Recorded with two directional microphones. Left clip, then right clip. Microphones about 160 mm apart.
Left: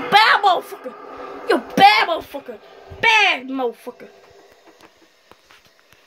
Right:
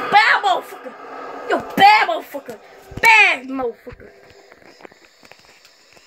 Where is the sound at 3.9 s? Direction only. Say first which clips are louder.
Left 3 dB; 30° left (ahead or behind).